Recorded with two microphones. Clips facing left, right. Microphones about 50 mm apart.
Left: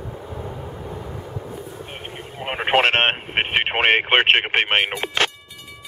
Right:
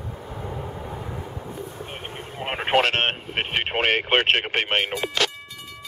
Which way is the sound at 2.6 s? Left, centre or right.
Left.